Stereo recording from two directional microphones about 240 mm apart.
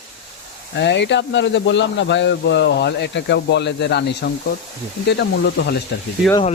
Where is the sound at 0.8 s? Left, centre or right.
Left.